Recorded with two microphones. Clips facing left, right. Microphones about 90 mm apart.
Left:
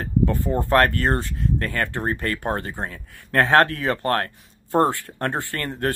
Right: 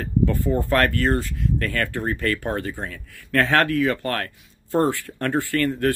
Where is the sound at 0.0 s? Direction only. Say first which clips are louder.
Even; 25° left (ahead or behind).